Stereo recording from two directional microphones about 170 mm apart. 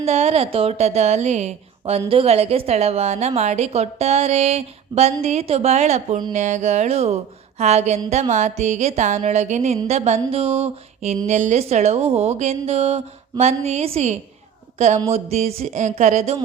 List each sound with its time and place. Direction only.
0.0 s a woman's voice: 40° right (ahead or behind)